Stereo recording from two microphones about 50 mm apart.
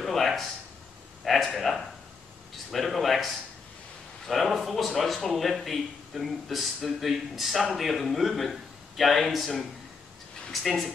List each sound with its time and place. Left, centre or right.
0.0 s a sound: centre
1.2 s speech: centre
4.3 s speech: centre